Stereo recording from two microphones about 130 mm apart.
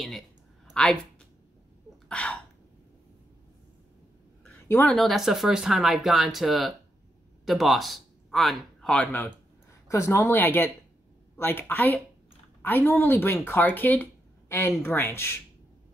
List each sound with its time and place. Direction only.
0.8 s speech: 5° left (ahead or behind)
2.0 s a sound: 10° left (ahead or behind)
4.6 s speech: 15° left (ahead or behind)
4.9 s a man's voice: centre (ahead or behind)
9.8 s speech: 20° left (ahead or behind)